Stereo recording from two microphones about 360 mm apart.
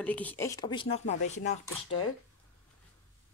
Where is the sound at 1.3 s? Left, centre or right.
Centre.